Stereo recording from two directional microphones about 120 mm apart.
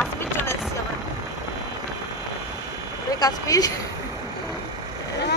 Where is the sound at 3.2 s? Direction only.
30° left (ahead or behind).